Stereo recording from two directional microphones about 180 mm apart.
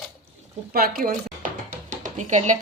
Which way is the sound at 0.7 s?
55° right (ahead or behind).